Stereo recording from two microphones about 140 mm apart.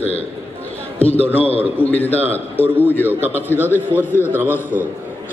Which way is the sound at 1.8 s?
10° left (ahead or behind).